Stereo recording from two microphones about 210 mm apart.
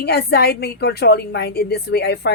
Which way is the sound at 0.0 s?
50° left (ahead or behind).